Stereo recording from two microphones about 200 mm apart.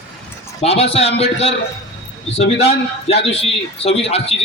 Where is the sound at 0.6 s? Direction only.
30° left (ahead or behind).